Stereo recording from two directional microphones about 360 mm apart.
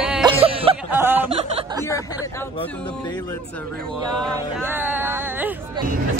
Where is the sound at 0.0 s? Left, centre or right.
Centre.